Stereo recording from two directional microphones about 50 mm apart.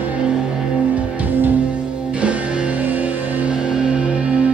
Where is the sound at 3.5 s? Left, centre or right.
Centre.